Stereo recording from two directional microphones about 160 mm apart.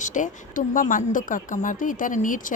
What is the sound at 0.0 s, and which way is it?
Speech, 50° left (ahead or behind).